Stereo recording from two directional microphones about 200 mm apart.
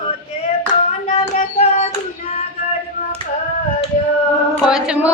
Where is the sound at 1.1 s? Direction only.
35° left (ahead or behind).